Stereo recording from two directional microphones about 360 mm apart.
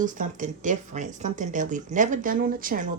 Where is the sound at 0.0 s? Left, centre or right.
Right.